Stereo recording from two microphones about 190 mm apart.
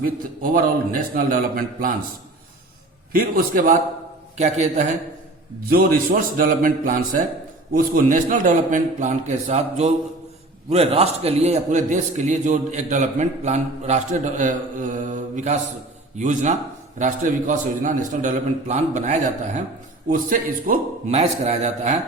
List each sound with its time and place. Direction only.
0.5 s a man's voice: 45° right (ahead or behind)
3.1 s a man's voice: 45° right (ahead or behind)